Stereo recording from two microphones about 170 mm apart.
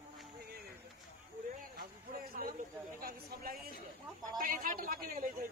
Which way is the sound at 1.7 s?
60° right (ahead or behind).